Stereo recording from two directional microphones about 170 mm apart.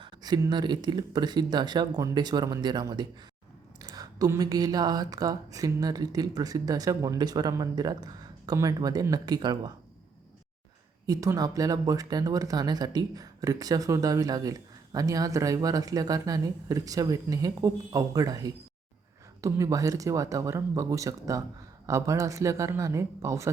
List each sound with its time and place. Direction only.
0.0 s speech: 25° right (ahead or behind)
11.0 s speech: 20° right (ahead or behind)